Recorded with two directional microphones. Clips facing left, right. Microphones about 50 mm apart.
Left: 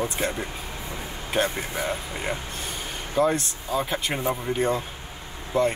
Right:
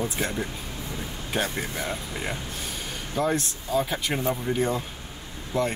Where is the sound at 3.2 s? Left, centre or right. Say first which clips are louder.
Left 3 dB; centre.